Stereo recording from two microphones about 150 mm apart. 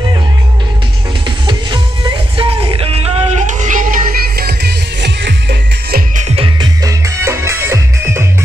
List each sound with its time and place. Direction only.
2.3 s music: 35° right (ahead or behind)
3.5 s music: 60° right (ahead or behind); by 6.0 s 90° right
6.1 s music: 45° right (ahead or behind)
6.8 s music: 20° right (ahead or behind)